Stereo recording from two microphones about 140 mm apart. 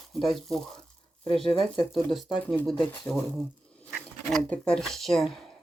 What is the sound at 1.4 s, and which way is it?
Speech, 40° left (ahead or behind).